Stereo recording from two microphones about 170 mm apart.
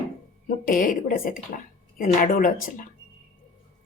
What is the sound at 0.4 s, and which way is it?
A woman's voice, 50° left (ahead or behind).